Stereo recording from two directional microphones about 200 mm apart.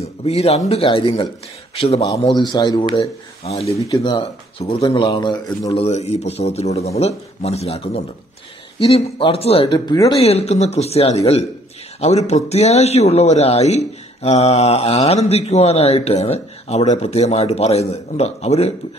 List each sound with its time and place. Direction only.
0.0 s speech: 30° left (ahead or behind)
3.6 s speech: 20° left (ahead or behind)
5.9 s speech: 35° left (ahead or behind)